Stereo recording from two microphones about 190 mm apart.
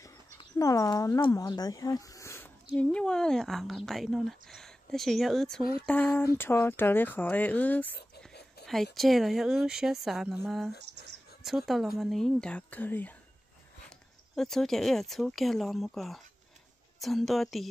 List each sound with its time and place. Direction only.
0.0 s speech: 15° left (ahead or behind)
8.3 s a sound: 60° left (ahead or behind)
8.9 s speech: centre (ahead or behind)